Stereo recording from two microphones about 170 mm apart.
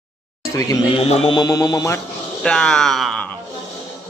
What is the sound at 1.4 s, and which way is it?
Speech, 20° left (ahead or behind).